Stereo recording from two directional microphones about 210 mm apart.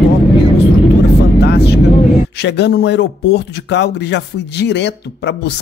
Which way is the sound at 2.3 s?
55° left (ahead or behind).